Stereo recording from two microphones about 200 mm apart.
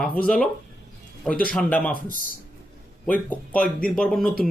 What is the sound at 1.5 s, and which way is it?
Speech, 10° left (ahead or behind).